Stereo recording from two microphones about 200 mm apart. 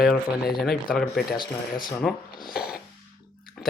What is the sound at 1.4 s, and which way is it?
Speech, 20° left (ahead or behind).